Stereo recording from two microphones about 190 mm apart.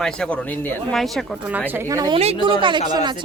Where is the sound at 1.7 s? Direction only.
15° right (ahead or behind).